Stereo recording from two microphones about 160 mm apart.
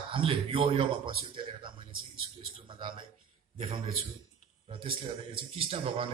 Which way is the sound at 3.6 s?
35° right (ahead or behind).